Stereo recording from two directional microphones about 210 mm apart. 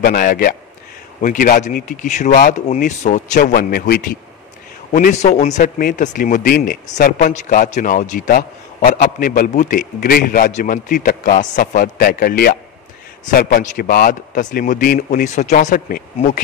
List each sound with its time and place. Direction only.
0.0 s speech: 40° left (ahead or behind)